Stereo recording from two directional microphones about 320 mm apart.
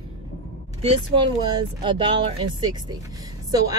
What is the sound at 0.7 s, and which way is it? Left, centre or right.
A child's voice, centre.